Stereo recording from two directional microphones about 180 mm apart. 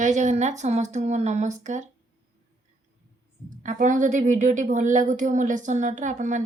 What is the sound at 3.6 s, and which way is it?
A woman's voice, 45° right (ahead or behind).